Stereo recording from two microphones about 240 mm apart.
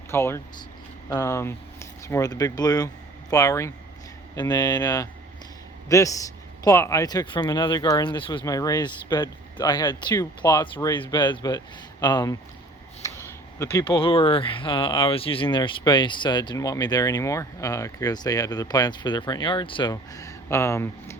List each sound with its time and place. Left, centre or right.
0.1 s speech: centre